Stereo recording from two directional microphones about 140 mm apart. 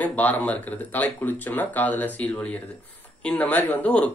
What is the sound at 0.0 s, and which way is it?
Speech, 10° left (ahead or behind).